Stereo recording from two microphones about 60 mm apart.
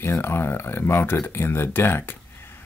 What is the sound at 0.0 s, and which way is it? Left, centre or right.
Speech, left.